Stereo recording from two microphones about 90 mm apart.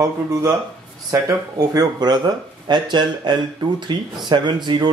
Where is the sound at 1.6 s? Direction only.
45° right (ahead or behind).